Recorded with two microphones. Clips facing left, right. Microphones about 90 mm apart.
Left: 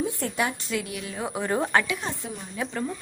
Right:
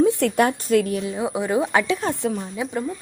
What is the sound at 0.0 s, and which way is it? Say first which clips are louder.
A woman's voice: right 9 dB; 75° right (ahead or behind).